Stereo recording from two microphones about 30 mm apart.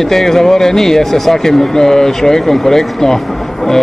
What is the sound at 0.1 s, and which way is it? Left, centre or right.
A man's voice, centre.